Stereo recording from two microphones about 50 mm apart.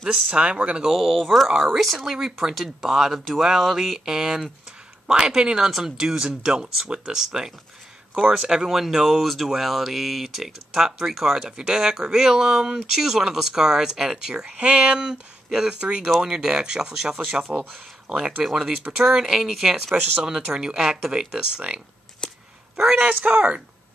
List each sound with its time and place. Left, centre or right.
0.1 s speech: right
0.8 s speech: centre
15.8 s speech: right
16.2 s speech: centre
17.1 s speech: right
18.4 s speech: centre
22.2 s a sound: centre
22.9 s speech: right